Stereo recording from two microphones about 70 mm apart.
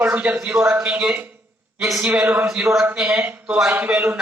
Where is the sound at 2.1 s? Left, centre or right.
Right.